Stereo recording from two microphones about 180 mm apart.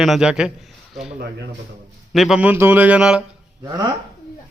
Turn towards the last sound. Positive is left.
turn(degrees=-20)  # may be behind; listen again after turning